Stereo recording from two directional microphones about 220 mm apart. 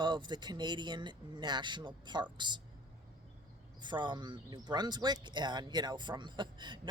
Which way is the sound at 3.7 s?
20° right (ahead or behind).